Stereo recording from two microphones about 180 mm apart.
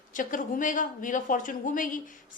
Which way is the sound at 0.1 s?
45° left (ahead or behind).